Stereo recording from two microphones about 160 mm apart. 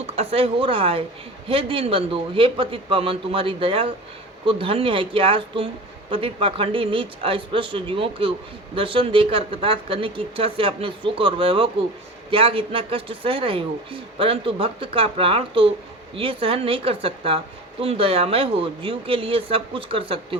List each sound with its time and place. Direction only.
0.0 s a woman's voice: 40° right (ahead or behind)